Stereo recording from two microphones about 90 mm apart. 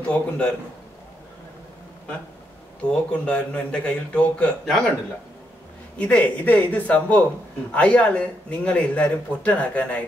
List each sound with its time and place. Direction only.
0.0 s speech: 15° left (ahead or behind)
3.1 s speech: 15° left (ahead or behind)
5.9 s speech: 15° left (ahead or behind)